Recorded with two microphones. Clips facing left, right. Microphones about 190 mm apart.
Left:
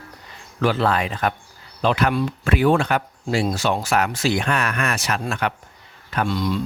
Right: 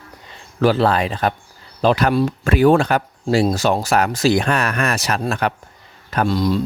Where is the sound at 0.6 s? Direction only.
35° right (ahead or behind).